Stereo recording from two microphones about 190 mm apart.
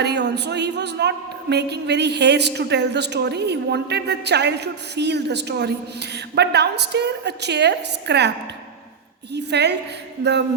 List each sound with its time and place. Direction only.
0.0 s a woman's voice: 65° right (ahead or behind)
9.3 s a woman's voice: 65° right (ahead or behind)